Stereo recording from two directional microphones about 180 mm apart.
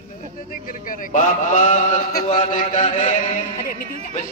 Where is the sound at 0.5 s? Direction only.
50° left (ahead or behind).